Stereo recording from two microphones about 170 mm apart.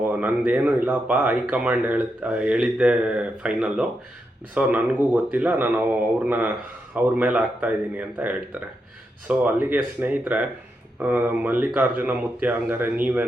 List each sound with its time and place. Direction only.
0.0 s speech: 10° right (ahead or behind)